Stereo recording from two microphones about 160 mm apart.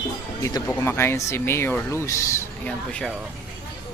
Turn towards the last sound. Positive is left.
turn(degrees=10)  # may be behind; listen again after turning